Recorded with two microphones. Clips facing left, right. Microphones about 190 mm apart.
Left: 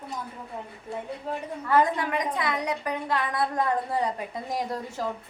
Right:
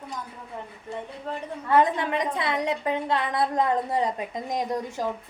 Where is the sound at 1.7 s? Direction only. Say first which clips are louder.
Right 2 dB; 25° right (ahead or behind).